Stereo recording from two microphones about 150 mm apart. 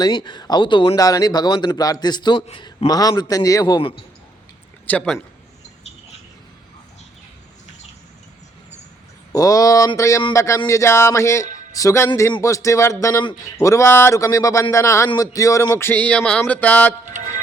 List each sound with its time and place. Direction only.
0.0 s speech: 30° left (ahead or behind)
3.8 s speech: 35° left (ahead or behind)
4.9 s a sound: 10° left (ahead or behind)
9.3 s speech: 25° left (ahead or behind)
15.1 s a sound: 25° left (ahead or behind)
17.1 s music: 55° right (ahead or behind)